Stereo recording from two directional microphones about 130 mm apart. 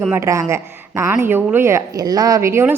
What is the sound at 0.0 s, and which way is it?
A woman's voice, 20° right (ahead or behind).